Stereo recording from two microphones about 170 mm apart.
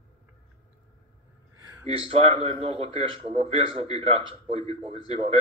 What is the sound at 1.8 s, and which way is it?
A man's voice, 35° right (ahead or behind).